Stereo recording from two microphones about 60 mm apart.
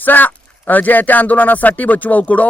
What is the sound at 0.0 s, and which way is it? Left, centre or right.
Speech, left.